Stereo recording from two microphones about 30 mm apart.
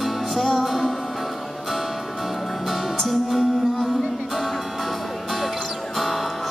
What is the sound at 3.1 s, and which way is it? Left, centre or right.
Music, centre.